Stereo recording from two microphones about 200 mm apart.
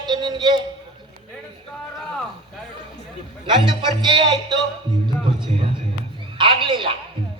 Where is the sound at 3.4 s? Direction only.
25° right (ahead or behind).